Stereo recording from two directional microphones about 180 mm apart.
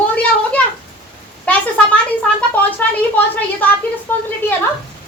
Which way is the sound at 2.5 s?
10° left (ahead or behind).